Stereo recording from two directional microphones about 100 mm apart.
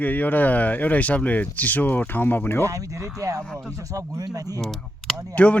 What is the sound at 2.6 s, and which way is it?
Speech, 35° right (ahead or behind).